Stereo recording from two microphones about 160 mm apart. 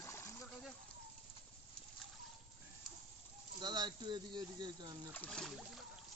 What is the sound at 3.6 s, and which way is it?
Speech, 25° right (ahead or behind).